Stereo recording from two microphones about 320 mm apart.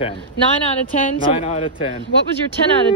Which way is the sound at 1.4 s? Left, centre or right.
Centre.